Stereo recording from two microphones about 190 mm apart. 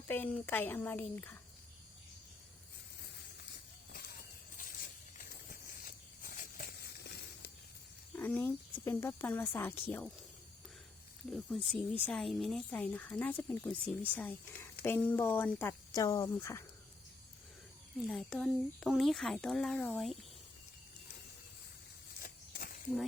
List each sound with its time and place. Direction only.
0.1 s speech: 10° left (ahead or behind)
5.8 s a sound: 50° left (ahead or behind)
8.1 s speech: 10° left (ahead or behind)
11.3 s speech: 5° left (ahead or behind)
18.1 s speech: centre (ahead or behind)
22.2 s walk: 50° left (ahead or behind)